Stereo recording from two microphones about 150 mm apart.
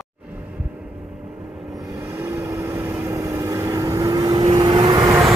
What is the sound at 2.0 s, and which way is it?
Vehicle, 15° right (ahead or behind).